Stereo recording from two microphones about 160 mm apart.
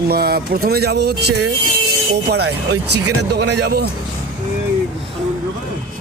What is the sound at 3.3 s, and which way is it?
Speech, 90° right.